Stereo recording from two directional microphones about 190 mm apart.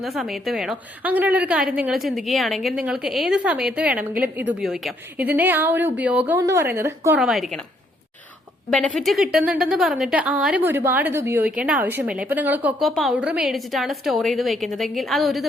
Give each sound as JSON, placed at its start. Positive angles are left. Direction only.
{"t": 0.0, "sound": "a woman's voice", "side_deg": 0}
{"t": 8.7, "sound": "a woman's voice", "side_deg": 5}